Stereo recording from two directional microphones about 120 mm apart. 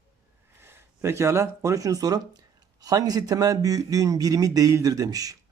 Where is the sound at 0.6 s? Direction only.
20° right (ahead or behind).